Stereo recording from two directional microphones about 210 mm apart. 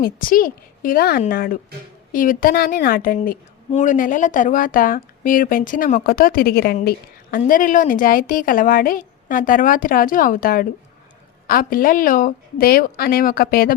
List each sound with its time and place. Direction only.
0.0 s a woman's voice: 40° left (ahead or behind)